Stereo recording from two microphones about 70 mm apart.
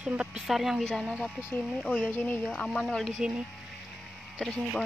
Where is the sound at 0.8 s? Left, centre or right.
Centre.